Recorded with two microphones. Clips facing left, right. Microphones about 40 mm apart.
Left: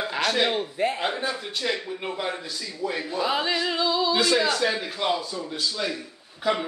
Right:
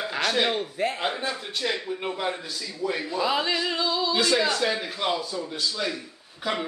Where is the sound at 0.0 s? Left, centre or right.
Centre.